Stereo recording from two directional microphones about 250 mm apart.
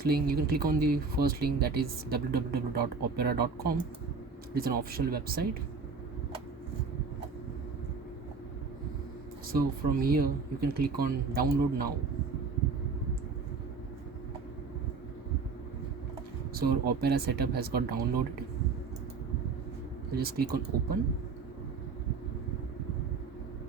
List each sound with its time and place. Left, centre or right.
0.0 s speech: right
9.5 s speech: right
16.6 s speech: right
20.1 s speech: right